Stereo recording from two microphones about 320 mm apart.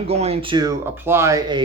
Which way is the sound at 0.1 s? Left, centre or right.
Centre.